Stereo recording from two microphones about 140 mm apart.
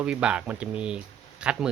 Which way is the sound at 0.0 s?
5° right (ahead or behind).